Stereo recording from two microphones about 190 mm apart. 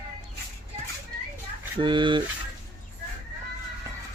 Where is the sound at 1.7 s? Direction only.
25° right (ahead or behind).